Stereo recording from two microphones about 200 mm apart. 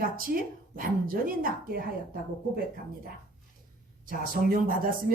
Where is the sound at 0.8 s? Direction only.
45° right (ahead or behind).